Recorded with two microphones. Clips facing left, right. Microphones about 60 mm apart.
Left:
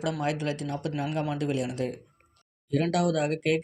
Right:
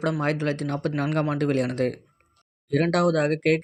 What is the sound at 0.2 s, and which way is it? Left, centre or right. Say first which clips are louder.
Speech: right 4 dB; right.